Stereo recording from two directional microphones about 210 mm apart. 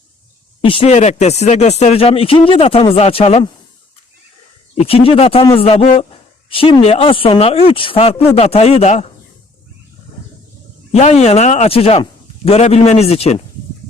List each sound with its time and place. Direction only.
0.6 s speech: 25° left (ahead or behind)
4.7 s speech: 25° left (ahead or behind)
10.9 s speech: 30° left (ahead or behind)